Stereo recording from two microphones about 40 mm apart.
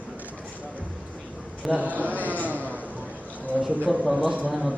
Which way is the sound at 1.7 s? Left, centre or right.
Right.